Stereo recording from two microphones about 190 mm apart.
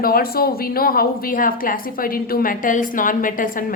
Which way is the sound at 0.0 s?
50° left (ahead or behind).